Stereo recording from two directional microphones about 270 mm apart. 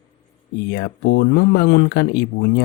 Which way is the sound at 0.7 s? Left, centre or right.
Left.